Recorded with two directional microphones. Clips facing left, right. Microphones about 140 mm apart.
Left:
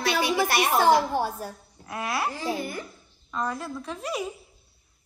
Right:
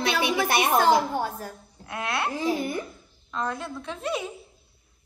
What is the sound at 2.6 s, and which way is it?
Speech, 25° right (ahead or behind).